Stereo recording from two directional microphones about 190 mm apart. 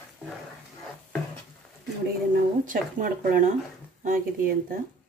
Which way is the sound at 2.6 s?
45° right (ahead or behind).